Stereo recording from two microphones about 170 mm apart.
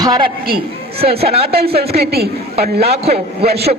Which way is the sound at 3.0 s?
40° right (ahead or behind).